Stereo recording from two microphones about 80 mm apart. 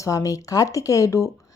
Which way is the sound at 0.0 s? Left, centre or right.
Left.